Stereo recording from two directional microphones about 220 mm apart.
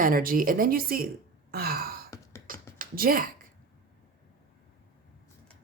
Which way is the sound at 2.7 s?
40° right (ahead or behind).